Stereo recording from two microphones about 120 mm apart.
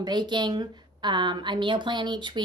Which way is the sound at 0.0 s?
35° right (ahead or behind).